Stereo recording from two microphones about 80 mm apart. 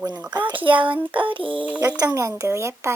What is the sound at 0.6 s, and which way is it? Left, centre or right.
Music, right.